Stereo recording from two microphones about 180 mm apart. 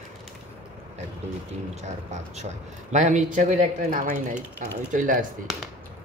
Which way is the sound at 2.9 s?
40° right (ahead or behind).